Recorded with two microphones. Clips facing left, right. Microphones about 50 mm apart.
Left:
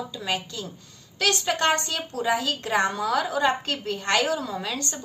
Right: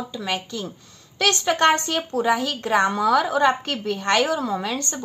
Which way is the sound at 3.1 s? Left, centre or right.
Right.